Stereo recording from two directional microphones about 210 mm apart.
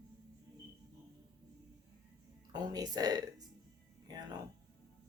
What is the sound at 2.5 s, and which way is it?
Speech, 20° right (ahead or behind).